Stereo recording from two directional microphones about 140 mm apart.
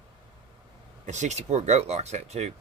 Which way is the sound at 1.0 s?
55° right (ahead or behind).